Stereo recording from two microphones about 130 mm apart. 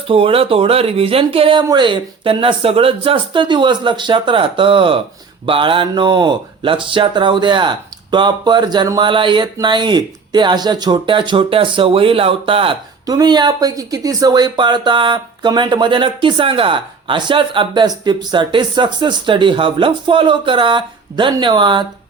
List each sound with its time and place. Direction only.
0.1 s speech: 45° right (ahead or behind)
13.1 s speech: 30° right (ahead or behind)